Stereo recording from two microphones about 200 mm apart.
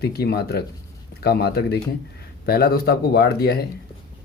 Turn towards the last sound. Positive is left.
turn(degrees=50)  # may be behind; listen again after turning